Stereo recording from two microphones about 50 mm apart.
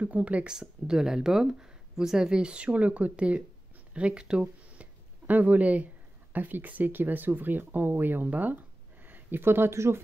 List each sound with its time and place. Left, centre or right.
0.0 s speech: right
0.5 s speech: centre
5.2 s speech: right